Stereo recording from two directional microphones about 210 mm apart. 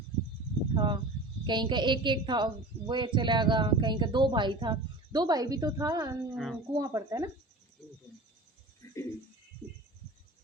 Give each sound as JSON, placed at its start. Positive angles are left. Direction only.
{"t": 0.7, "sound": "a woman's voice", "side_deg": -20}
{"t": 6.3, "sound": "speech", "side_deg": 0}
{"t": 6.7, "sound": "speech", "side_deg": -15}
{"t": 8.8, "sound": "a sound", "side_deg": 15}